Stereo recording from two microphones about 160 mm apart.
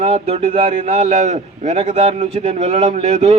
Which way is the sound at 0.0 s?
40° right (ahead or behind).